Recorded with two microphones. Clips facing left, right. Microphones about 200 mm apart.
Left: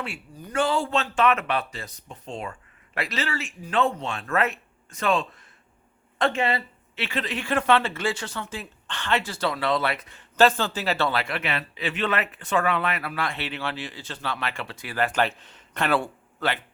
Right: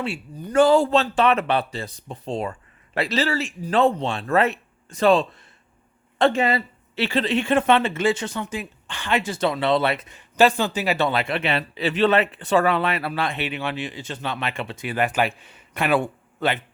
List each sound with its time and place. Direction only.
0.5 s a man's voice: 40° right (ahead or behind); by 16.6 s 20° right (ahead or behind)